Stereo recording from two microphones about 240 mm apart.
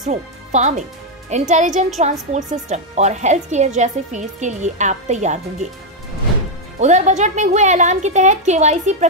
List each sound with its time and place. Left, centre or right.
0.0 s a woman's voice: right
6.8 s a woman's voice: right